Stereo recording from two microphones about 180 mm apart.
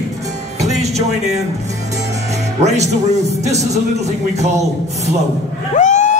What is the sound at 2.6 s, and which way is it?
A man's voice, 40° right (ahead or behind).